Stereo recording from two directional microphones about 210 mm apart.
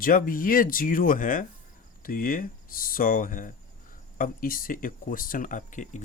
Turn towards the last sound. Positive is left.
turn(degrees=35)  # may be behind; listen again after turning